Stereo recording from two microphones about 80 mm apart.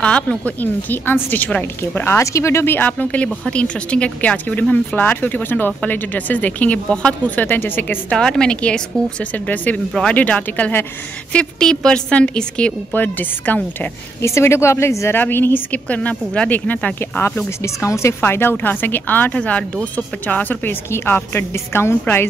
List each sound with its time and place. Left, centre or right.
0.0 s speech: centre
8.1 s a woman's voice: centre
11.3 s a woman's voice: centre
13.7 s speech: left
17.6 s speech: left
18.2 s a woman's voice: left